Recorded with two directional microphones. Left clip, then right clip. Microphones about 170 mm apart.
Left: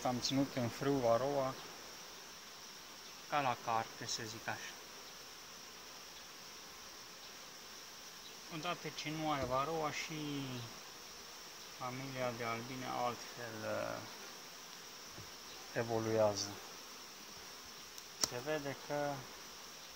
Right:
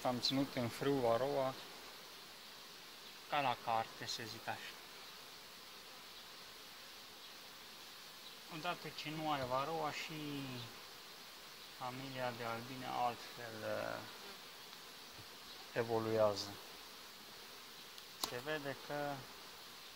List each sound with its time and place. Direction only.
0.0 s speech: 45° right (ahead or behind)
3.3 s speech: 25° right (ahead or behind)
8.6 s speech: 5° right (ahead or behind)
11.8 s speech: 10° right (ahead or behind)
13.7 s speech: 35° right (ahead or behind)
15.7 s speech: 45° right (ahead or behind)
18.5 s speech: 25° right (ahead or behind)